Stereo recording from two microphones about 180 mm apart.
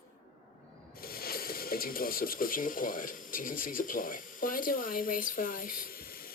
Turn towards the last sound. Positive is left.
turn(degrees=55)  # may be behind; listen again after turning